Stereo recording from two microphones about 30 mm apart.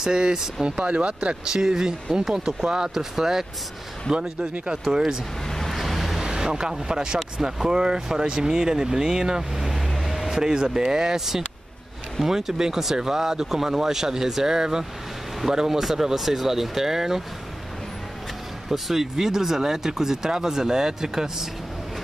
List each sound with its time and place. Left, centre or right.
0.0 s speech: right
0.7 s speech: right
1.5 s speech: right
4.1 s speech: right
5.5 s vehicle: centre
5.8 s vehicle: centre
6.2 s speech: right
9.6 s vehicle: centre
10.3 s speech: right
18.7 s speech: centre